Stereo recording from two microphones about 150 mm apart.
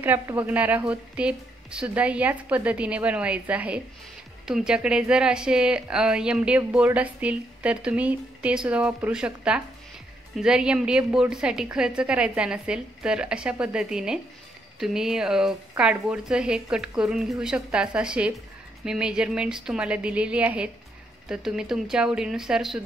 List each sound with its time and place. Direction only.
0.0 s a woman's voice: 10° right (ahead or behind)